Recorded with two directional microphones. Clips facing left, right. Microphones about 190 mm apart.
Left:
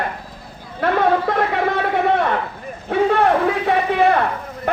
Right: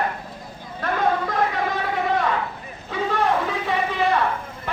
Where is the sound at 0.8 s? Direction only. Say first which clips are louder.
Left 5 dB; 65° left (ahead or behind).